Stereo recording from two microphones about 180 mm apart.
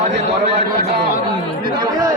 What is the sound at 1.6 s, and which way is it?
Chatter, 25° right (ahead or behind).